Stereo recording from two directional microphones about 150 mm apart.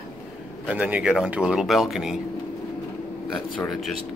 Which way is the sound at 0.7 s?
10° right (ahead or behind).